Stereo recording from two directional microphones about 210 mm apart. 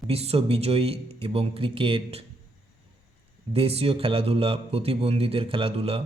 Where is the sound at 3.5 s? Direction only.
30° right (ahead or behind).